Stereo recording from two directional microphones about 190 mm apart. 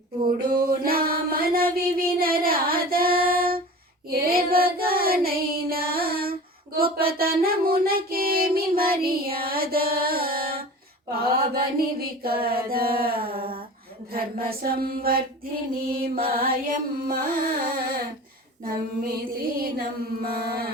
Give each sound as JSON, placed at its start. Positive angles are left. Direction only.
{"t": 0.4, "sound": "music", "side_deg": -50}
{"t": 4.1, "sound": "child singing", "side_deg": -50}
{"t": 6.7, "sound": "a sound", "side_deg": -50}
{"t": 11.1, "sound": "mantra", "side_deg": -50}
{"t": 12.7, "sound": "a sound", "side_deg": -50}
{"t": 14.1, "sound": "music", "side_deg": -50}
{"t": 20.2, "sound": "music", "side_deg": -55}